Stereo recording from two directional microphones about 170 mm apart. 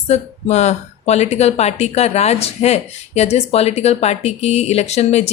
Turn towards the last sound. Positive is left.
turn(degrees=40)  # may be behind; listen again after turning